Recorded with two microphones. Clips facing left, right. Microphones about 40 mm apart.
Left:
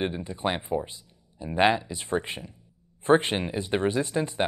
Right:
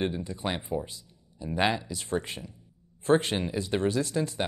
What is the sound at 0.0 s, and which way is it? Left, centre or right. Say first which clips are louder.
Speech: left 2 dB; left.